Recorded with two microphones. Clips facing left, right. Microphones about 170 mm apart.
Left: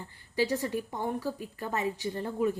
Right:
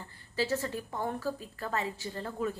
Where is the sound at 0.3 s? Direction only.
15° left (ahead or behind).